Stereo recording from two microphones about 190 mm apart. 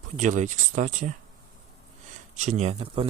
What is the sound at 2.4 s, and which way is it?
Speech, 35° right (ahead or behind).